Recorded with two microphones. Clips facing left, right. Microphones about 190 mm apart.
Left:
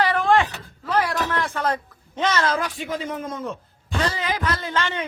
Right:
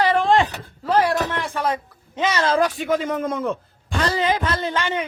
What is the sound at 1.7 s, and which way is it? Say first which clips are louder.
Speech: right 1 dB; 5° right (ahead or behind).